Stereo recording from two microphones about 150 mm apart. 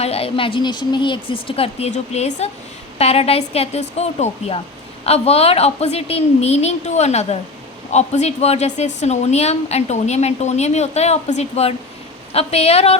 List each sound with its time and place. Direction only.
0.0 s a woman's voice: 40° left (ahead or behind)